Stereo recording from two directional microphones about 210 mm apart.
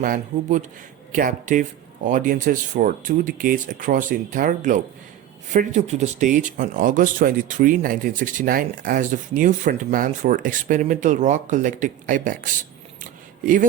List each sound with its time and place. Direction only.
0.0 s speech: 40° right (ahead or behind)
13.0 s keys jangling: 40° right (ahead or behind)